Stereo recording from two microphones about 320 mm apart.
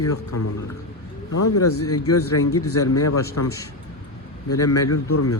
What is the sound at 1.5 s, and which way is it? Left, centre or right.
A man's voice, left.